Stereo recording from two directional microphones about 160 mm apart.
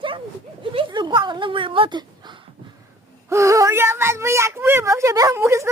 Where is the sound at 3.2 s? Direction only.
20° right (ahead or behind).